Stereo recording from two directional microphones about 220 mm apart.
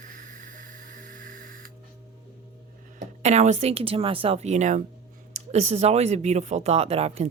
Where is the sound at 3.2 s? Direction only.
30° right (ahead or behind).